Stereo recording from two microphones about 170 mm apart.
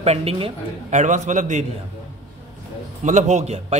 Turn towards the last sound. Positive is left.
turn(degrees=-40)  # may be behind; listen again after turning